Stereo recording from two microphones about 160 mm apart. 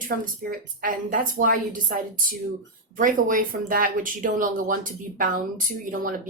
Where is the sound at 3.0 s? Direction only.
55° right (ahead or behind).